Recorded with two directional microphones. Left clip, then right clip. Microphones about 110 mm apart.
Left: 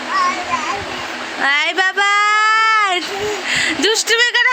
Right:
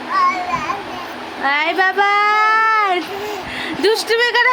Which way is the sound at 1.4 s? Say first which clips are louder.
Even; 5° left (ahead or behind).